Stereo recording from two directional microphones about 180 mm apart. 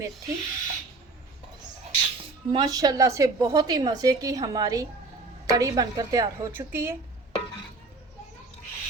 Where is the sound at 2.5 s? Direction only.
20° right (ahead or behind).